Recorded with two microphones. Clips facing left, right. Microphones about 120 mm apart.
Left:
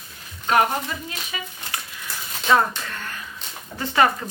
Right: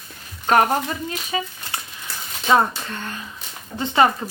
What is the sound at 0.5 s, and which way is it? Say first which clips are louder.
Speech: right 3 dB; 45° right (ahead or behind).